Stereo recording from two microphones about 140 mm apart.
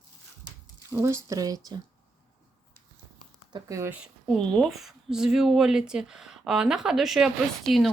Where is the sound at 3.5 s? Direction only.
20° right (ahead or behind).